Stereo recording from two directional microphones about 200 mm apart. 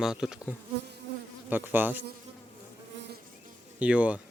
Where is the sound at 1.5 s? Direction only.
10° right (ahead or behind).